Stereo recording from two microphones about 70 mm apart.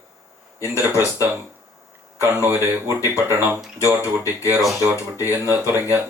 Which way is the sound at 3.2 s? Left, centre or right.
Right.